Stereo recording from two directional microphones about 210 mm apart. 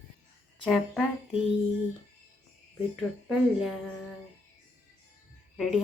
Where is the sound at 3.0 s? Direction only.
Centre (ahead or behind).